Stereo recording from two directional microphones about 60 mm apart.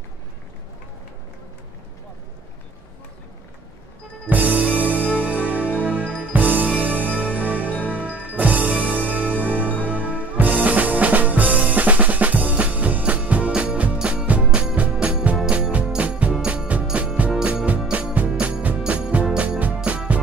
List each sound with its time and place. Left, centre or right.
4.3 s music: right
10.3 s drum kit: right
13.6 s music: right